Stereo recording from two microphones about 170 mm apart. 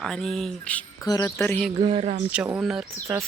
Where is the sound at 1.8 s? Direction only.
40° right (ahead or behind).